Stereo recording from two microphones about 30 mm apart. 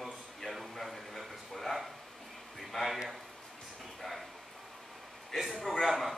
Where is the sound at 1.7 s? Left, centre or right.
Left.